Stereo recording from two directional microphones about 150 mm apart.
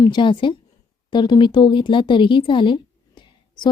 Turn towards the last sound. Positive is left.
turn(degrees=30)  # may be behind; listen again after turning